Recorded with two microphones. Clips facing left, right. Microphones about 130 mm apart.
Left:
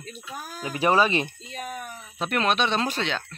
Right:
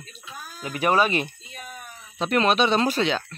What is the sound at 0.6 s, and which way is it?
Speech, 30° left (ahead or behind).